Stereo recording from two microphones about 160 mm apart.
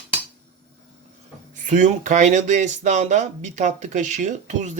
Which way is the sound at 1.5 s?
50° right (ahead or behind).